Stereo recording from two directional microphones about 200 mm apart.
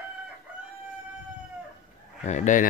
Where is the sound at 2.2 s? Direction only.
35° left (ahead or behind).